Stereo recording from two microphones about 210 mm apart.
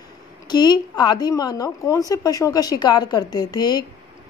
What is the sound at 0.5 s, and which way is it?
A woman's voice, 20° left (ahead or behind).